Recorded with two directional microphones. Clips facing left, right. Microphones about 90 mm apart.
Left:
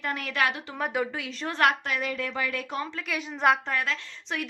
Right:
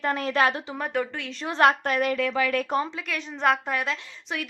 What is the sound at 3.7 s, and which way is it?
Speech, 15° right (ahead or behind).